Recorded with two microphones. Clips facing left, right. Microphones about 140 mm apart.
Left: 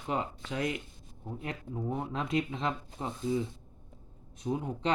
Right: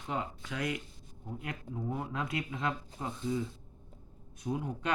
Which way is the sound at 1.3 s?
25° left (ahead or behind).